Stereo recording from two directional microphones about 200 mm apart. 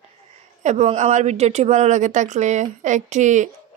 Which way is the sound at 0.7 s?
35° right (ahead or behind).